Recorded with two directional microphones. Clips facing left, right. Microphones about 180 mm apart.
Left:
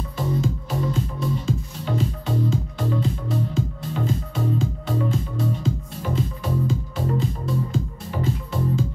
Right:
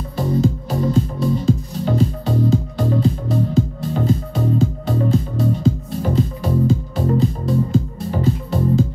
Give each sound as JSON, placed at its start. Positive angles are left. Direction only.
{"t": 0.3, "sound": "music", "side_deg": -35}